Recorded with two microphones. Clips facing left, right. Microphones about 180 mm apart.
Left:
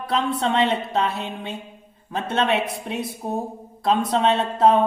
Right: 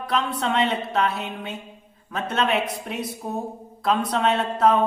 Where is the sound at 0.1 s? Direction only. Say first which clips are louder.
Left 2 dB; 25° left (ahead or behind).